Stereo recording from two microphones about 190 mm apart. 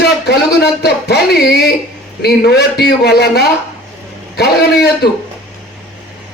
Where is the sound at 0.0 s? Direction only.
60° left (ahead or behind).